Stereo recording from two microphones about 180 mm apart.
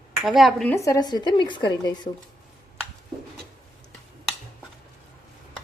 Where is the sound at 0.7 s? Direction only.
15° left (ahead or behind).